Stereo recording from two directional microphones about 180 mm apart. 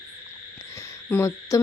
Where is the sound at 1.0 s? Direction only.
15° left (ahead or behind).